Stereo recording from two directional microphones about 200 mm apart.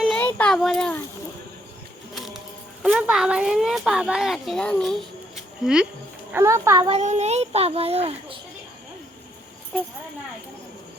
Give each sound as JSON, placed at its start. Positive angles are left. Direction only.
{"t": 0.3, "sound": "a child's voice", "side_deg": 5}
{"t": 2.8, "sound": "a child's voice", "side_deg": -5}
{"t": 6.3, "sound": "a child's voice", "side_deg": -15}
{"t": 7.0, "sound": "a child's voice", "side_deg": -35}